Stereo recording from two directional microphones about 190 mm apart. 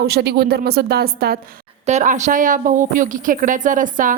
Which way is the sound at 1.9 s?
40° right (ahead or behind).